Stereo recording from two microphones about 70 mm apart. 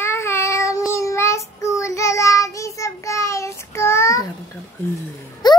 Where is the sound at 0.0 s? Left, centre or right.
Left.